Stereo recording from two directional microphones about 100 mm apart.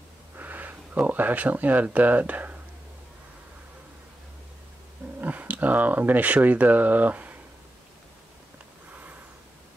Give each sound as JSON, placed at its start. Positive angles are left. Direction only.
{"t": 0.4, "sound": "speech", "side_deg": -15}
{"t": 5.2, "sound": "speech", "side_deg": -15}